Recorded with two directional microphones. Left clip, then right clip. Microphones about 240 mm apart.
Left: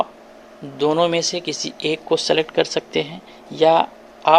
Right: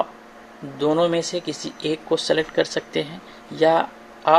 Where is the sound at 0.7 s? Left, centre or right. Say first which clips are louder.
Left 2 dB; left.